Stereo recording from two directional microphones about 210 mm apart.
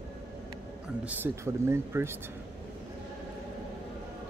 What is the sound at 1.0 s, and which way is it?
Speech, 10° right (ahead or behind).